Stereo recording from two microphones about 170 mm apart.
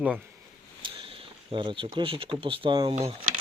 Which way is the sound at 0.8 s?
30° right (ahead or behind).